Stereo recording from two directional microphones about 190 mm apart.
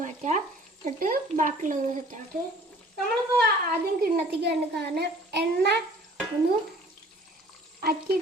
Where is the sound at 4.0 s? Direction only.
60° right (ahead or behind).